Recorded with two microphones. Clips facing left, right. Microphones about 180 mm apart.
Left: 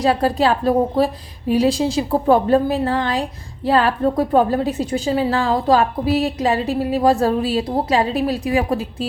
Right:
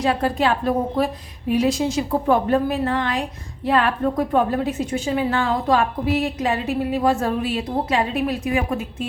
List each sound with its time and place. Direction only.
0.0 s a woman's voice: 35° left (ahead or behind)